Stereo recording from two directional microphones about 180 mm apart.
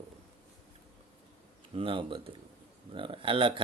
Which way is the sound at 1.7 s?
30° right (ahead or behind).